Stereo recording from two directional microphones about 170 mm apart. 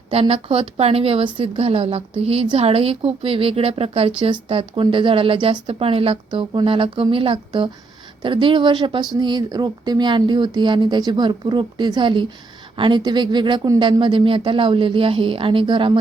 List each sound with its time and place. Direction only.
0.1 s speech: 35° right (ahead or behind)